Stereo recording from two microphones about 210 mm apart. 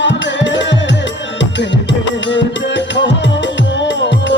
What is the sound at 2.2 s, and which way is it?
Music, 60° left (ahead or behind).